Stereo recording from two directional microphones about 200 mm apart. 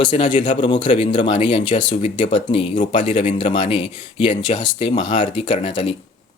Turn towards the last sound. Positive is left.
turn(degrees=25)  # may be behind; listen again after turning